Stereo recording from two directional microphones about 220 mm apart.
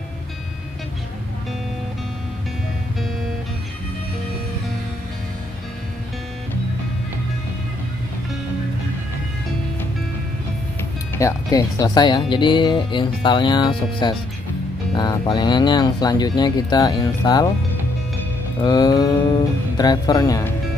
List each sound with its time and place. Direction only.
11.1 s speech: 15° left (ahead or behind)
18.6 s speech: 20° left (ahead or behind)